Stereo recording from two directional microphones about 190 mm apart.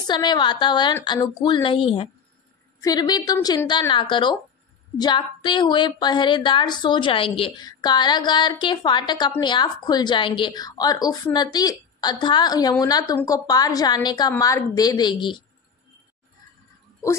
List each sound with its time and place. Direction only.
0.0 s a woman's voice: 20° left (ahead or behind)